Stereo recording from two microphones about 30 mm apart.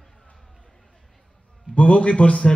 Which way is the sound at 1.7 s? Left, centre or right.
Left.